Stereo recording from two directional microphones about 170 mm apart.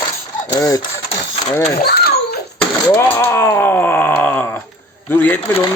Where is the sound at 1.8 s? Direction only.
65° left (ahead or behind).